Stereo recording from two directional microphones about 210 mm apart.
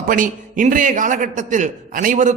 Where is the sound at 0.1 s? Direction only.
40° right (ahead or behind).